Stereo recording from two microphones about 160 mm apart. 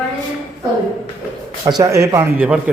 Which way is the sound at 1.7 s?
20° right (ahead or behind).